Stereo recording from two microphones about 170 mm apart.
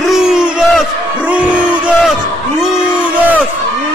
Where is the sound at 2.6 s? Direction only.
5° right (ahead or behind).